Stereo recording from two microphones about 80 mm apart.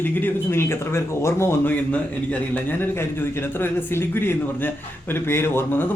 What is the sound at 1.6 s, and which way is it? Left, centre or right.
A man's voice, centre.